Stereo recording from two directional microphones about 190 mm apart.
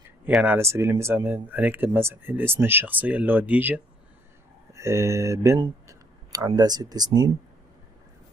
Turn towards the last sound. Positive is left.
turn(degrees=-20)  # may be behind; listen again after turning